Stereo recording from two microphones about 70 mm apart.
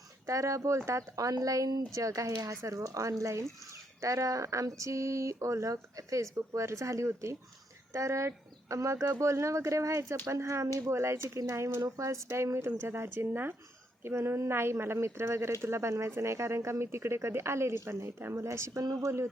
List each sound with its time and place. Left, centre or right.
0.3 s speech: right